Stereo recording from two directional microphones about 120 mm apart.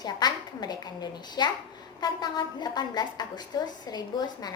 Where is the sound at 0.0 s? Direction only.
35° left (ahead or behind).